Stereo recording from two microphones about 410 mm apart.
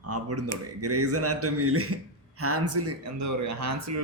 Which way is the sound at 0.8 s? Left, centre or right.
Right.